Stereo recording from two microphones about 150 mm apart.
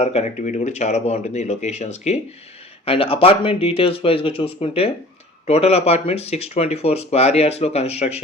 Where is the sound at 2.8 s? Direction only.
40° left (ahead or behind).